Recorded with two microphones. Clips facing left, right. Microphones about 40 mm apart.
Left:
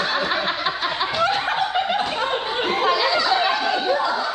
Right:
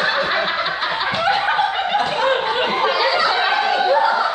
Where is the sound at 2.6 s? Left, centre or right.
Centre.